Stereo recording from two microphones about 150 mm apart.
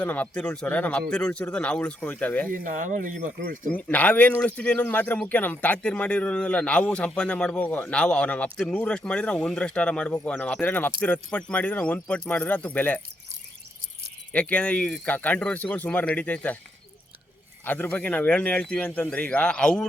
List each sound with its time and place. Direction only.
0.0 s speech: 10° left (ahead or behind)
2.6 s speech: 60° right (ahead or behind)
3.8 s speech: 10° left (ahead or behind)
14.3 s speech: 10° left (ahead or behind)
17.7 s speech: 10° left (ahead or behind)